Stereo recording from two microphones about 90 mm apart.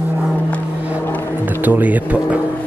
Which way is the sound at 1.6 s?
20° right (ahead or behind).